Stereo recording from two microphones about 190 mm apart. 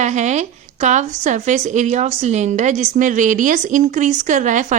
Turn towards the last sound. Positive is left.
turn(degrees=-40)  # may be behind; listen again after turning